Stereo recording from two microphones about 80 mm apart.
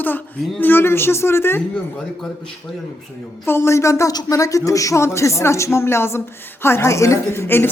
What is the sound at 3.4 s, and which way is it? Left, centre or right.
Speech, left.